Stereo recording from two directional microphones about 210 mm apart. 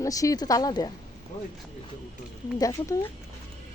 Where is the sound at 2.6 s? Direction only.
15° left (ahead or behind).